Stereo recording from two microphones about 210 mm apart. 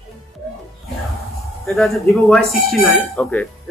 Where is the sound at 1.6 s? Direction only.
Centre (ahead or behind).